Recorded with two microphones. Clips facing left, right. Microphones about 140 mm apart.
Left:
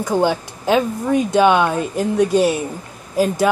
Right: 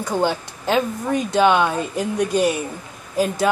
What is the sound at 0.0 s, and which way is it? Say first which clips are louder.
A woman's voice: left 3 dB; 15° left (ahead or behind).